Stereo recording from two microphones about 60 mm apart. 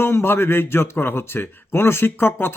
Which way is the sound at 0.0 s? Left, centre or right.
Left.